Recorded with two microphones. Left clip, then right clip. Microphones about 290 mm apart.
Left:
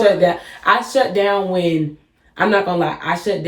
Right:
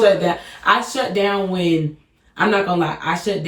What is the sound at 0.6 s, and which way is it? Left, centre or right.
Speech, centre.